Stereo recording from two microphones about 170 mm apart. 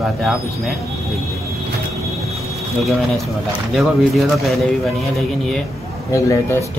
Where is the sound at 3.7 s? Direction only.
Centre (ahead or behind).